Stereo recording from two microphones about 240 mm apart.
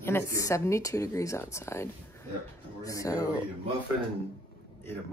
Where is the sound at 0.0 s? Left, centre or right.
Centre.